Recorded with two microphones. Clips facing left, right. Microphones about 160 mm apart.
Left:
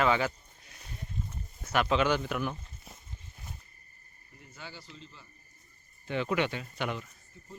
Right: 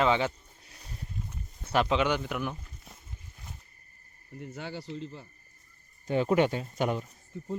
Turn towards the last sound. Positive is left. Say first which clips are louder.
# right 14 dB
turn(degrees=-75)  # may be behind; listen again after turning